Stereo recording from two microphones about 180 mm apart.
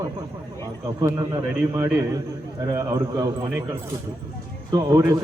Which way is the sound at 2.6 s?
20° right (ahead or behind).